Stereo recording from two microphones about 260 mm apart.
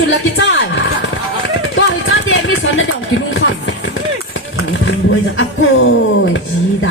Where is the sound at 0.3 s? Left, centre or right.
Left.